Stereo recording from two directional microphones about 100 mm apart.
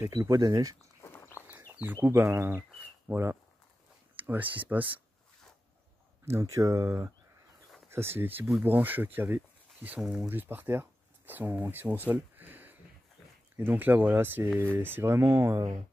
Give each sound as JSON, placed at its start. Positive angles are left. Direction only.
{"t": 0.0, "sound": "speech", "side_deg": -30}
{"t": 1.0, "sound": "walk", "side_deg": 25}
{"t": 1.8, "sound": "speech", "side_deg": -20}
{"t": 6.4, "sound": "speech", "side_deg": -35}
{"t": 7.9, "sound": "speech", "side_deg": -25}
{"t": 9.9, "sound": "speech", "side_deg": -5}
{"t": 10.2, "sound": "speech", "side_deg": -20}